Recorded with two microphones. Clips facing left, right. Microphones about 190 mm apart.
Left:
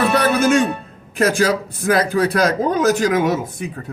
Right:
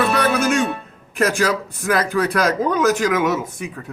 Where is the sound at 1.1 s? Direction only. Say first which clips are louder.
Left 2 dB; 35° left (ahead or behind).